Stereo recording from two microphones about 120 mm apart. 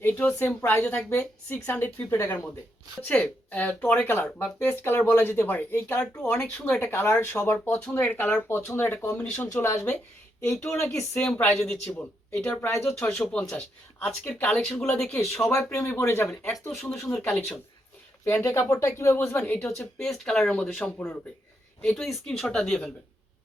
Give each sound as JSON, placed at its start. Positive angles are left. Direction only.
{"t": 0.0, "sound": "speech", "side_deg": 15}
{"t": 9.5, "sound": "speech", "side_deg": 25}
{"t": 11.2, "sound": "speech", "side_deg": 10}
{"t": 15.4, "sound": "speech", "side_deg": 20}
{"t": 16.2, "sound": "speech", "side_deg": 10}
{"t": 18.3, "sound": "speech", "side_deg": 20}
{"t": 19.5, "sound": "speech", "side_deg": 5}